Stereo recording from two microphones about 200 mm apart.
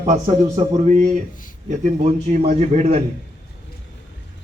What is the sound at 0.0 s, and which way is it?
A man's voice, 35° right (ahead or behind).